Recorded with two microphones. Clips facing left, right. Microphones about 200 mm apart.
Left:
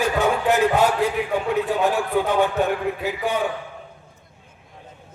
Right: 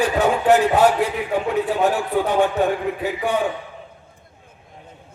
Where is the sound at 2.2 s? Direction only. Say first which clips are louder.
Right 2 dB; 15° right (ahead or behind).